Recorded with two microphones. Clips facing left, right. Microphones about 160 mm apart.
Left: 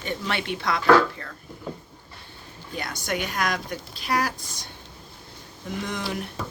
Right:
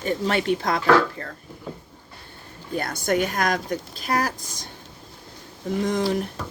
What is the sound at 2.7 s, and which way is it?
A woman's voice, 50° right (ahead or behind).